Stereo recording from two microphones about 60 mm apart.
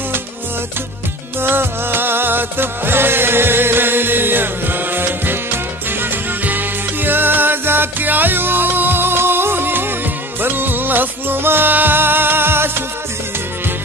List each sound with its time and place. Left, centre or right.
1.4 s music: right